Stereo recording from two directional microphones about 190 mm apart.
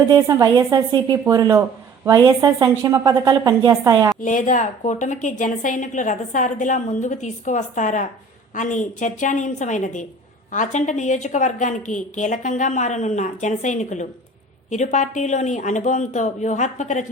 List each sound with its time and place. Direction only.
0.0 s a woman's voice: 15° right (ahead or behind)
4.2 s a woman's voice: 40° left (ahead or behind)